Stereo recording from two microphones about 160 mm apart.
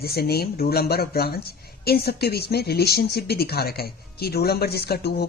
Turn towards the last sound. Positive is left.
turn(degrees=80)